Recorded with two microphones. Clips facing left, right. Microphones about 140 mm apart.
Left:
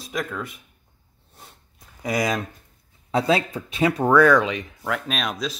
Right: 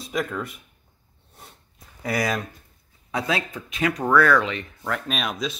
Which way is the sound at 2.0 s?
15° left (ahead or behind).